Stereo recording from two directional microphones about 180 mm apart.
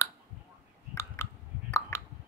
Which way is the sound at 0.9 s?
15° left (ahead or behind).